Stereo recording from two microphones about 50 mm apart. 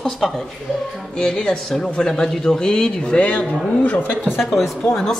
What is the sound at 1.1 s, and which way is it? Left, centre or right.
A man's voice, centre.